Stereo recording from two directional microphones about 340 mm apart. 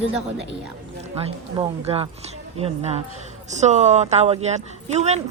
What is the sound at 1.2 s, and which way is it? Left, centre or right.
Speech, centre.